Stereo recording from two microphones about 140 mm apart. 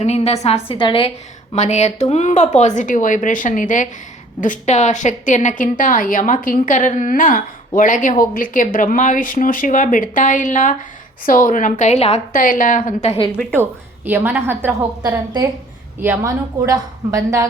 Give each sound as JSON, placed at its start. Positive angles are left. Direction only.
{"t": 0.0, "sound": "a woman's voice", "side_deg": 50}
{"t": 0.8, "sound": "a woman's voice", "side_deg": 35}
{"t": 1.5, "sound": "a woman's voice", "side_deg": 55}
{"t": 7.8, "sound": "a woman's voice", "side_deg": 70}
{"t": 11.3, "sound": "a woman's voice", "side_deg": 75}
{"t": 12.3, "sound": "a woman's voice", "side_deg": 85}
{"t": 13.1, "sound": "a woman's voice", "side_deg": 40}
{"t": 13.6, "sound": "a woman's voice", "side_deg": -15}